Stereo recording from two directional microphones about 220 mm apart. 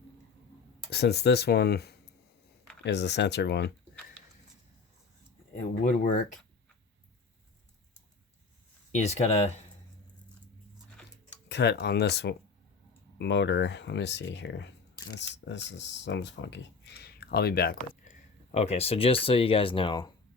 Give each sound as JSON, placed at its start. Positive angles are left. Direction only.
{"t": 0.9, "sound": "speech", "side_deg": 50}
{"t": 5.6, "sound": "speech", "side_deg": 35}
{"t": 8.9, "sound": "speech", "side_deg": 30}
{"t": 10.8, "sound": "a sound", "side_deg": 5}
{"t": 11.4, "sound": "speech", "side_deg": 50}
{"t": 18.5, "sound": "speech", "side_deg": 30}